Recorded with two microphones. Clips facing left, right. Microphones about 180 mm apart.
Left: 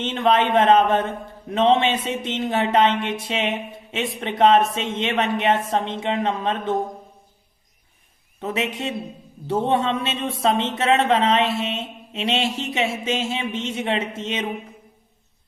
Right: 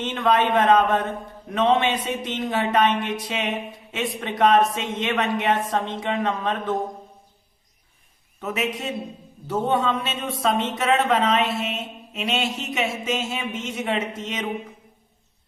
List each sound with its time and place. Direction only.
0.0 s a man's voice: 25° left (ahead or behind)
8.4 s a man's voice: 30° left (ahead or behind)